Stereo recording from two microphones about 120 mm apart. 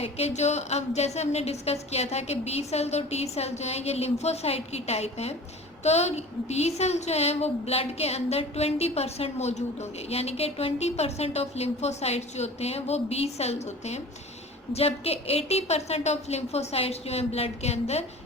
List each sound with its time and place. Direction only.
0.0 s a woman's voice: 60° left (ahead or behind)